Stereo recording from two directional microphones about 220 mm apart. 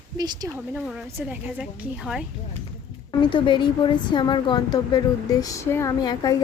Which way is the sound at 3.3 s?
20° left (ahead or behind).